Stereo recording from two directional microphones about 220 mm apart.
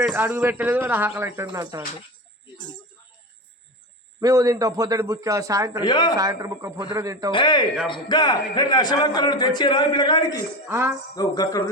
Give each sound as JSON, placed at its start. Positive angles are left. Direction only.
{"t": 0.0, "sound": "a man's voice", "side_deg": -10}
{"t": 4.2, "sound": "a man's voice", "side_deg": -15}
{"t": 5.8, "sound": "a man's voice", "side_deg": 20}
{"t": 6.1, "sound": "a man's voice", "side_deg": -15}
{"t": 7.3, "sound": "a man's voice", "side_deg": 20}
{"t": 10.7, "sound": "a man's voice", "side_deg": -10}
{"t": 11.1, "sound": "speech", "side_deg": 15}